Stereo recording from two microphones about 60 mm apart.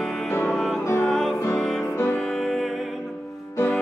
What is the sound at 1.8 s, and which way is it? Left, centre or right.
Music, left.